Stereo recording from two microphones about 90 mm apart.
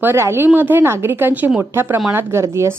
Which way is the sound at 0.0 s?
25° right (ahead or behind).